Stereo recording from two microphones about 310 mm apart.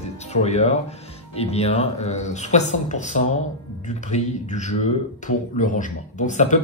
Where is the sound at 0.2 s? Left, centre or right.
Left.